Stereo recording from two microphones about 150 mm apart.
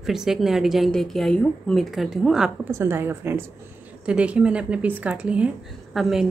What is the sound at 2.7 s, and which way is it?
A woman's voice, 15° right (ahead or behind).